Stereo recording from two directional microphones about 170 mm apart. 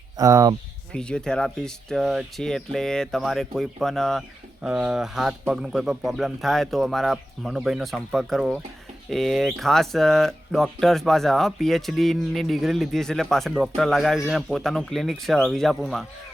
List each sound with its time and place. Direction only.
0.2 s speech: 20° right (ahead or behind)
0.9 s speech: 5° left (ahead or behind)